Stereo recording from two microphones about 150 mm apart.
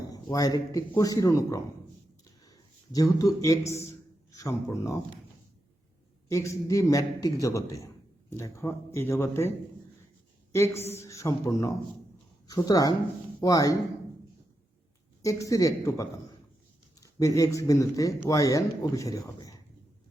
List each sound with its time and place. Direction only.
0.0 s a man's voice: 25° left (ahead or behind)
6.2 s a man's voice: 20° left (ahead or behind)
10.5 s a man's voice: 20° left (ahead or behind)
15.2 s a man's voice: 20° left (ahead or behind)